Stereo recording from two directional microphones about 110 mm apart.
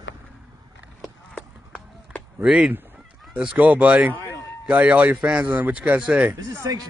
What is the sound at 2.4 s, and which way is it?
A man's voice, 5° right (ahead or behind).